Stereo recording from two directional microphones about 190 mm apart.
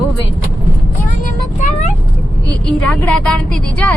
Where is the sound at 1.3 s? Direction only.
35° left (ahead or behind).